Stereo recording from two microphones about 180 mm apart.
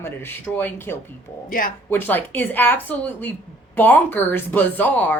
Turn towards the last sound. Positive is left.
turn(degrees=10)  # may be behind; listen again after turning